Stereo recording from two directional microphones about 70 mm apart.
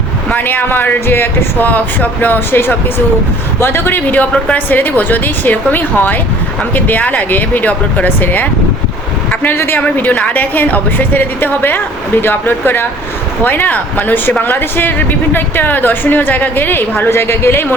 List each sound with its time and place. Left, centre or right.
0.3 s a woman's voice: left